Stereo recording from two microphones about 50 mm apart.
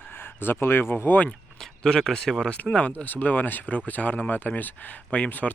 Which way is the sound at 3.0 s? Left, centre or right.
Left.